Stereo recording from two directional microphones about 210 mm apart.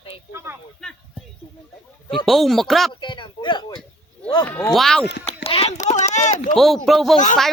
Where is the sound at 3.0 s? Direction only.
20° left (ahead or behind).